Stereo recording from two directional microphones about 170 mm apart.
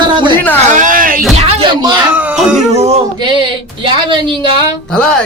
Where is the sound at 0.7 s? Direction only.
50° right (ahead or behind).